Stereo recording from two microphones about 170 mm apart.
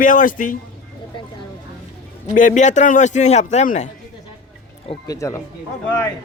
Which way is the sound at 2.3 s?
50° left (ahead or behind).